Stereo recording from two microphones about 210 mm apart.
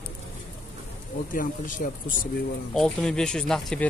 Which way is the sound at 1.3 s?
40° left (ahead or behind).